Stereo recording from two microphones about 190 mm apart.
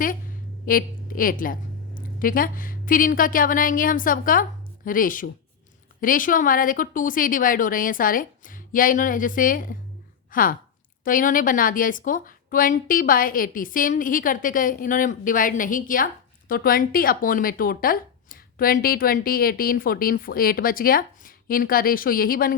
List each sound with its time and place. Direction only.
0.6 s a woman's voice: 50° left (ahead or behind)